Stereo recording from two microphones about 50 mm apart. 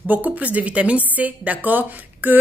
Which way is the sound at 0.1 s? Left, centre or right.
Right.